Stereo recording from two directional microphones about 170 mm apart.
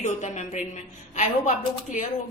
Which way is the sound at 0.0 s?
45° left (ahead or behind).